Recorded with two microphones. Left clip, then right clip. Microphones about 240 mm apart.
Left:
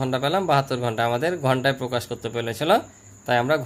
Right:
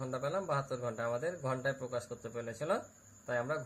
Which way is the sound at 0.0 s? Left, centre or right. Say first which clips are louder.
Left 14 dB; left.